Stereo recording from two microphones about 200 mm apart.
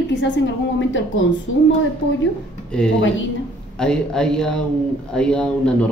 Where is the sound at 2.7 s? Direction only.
5° left (ahead or behind).